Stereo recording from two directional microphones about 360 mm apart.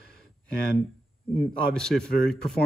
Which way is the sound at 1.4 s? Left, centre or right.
Centre.